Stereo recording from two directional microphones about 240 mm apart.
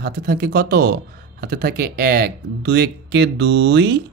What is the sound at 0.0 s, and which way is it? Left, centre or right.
Speech, right.